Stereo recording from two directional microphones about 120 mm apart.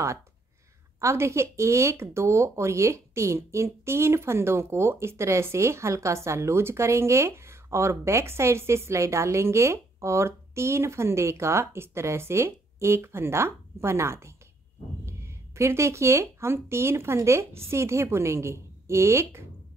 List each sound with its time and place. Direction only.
1.0 s speech: 25° right (ahead or behind)